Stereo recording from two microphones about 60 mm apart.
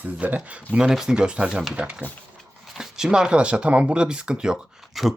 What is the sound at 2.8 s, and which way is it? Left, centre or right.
Speech, centre.